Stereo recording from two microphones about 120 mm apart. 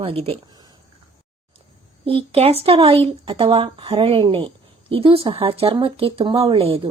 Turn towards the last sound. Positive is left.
turn(degrees=-55)  # may be behind; listen again after turning